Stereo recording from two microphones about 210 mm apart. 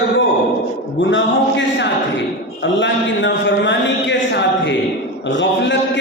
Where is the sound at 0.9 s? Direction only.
60° left (ahead or behind).